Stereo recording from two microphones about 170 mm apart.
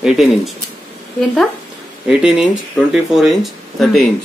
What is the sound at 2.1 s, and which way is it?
Speech, 5° right (ahead or behind).